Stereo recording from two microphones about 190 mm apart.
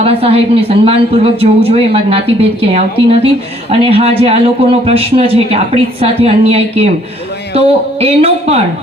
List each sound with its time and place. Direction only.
0.0 s speech: 30° right (ahead or behind)